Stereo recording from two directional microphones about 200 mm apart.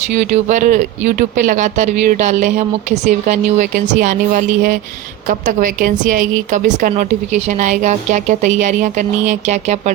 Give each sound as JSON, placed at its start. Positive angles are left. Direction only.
{"t": 0.1, "sound": "speech", "side_deg": -35}